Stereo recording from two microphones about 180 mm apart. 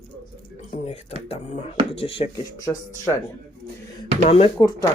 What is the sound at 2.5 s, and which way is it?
Speech, 15° left (ahead or behind).